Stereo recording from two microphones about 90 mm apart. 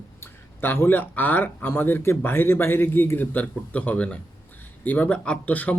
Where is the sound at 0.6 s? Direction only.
25° left (ahead or behind).